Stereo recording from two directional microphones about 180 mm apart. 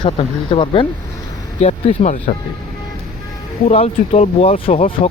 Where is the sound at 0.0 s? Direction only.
30° left (ahead or behind).